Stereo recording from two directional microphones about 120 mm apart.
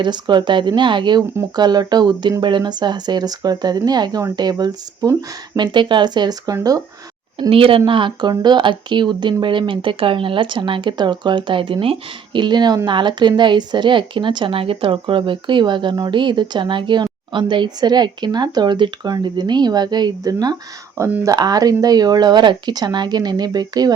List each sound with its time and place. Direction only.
0.0 s speech: 40° right (ahead or behind)
7.5 s speech: 50° right (ahead or behind); by 23.9 s 35° right (ahead or behind)